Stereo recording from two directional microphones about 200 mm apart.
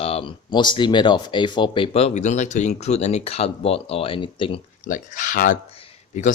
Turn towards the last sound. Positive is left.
turn(degrees=35)  # may be behind; listen again after turning